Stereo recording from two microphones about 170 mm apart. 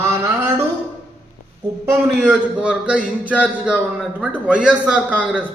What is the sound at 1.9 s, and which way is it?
A man's voice, 10° right (ahead or behind).